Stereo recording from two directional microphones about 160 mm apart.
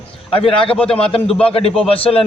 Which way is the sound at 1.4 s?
35° left (ahead or behind).